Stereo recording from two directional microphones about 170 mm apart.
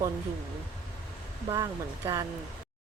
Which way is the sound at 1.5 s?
20° right (ahead or behind).